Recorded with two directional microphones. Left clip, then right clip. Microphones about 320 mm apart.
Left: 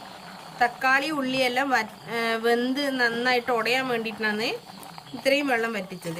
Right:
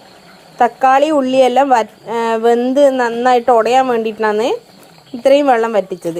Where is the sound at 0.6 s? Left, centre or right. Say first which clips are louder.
Right 11 dB; right.